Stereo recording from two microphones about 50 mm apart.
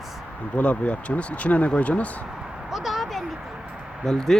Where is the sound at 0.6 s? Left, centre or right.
Left.